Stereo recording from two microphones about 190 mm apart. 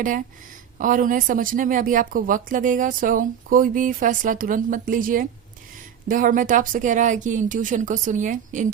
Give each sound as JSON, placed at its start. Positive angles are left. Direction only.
{"t": 0.8, "sound": "speech", "side_deg": -45}